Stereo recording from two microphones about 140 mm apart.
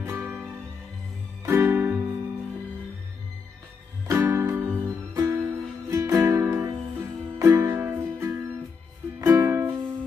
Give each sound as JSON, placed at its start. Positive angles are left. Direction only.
{"t": 0.0, "sound": "music", "side_deg": -15}
{"t": 4.1, "sound": "music", "side_deg": -20}